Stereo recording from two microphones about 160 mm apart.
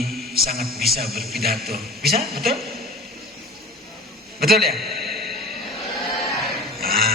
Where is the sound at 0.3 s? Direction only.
70° right (ahead or behind).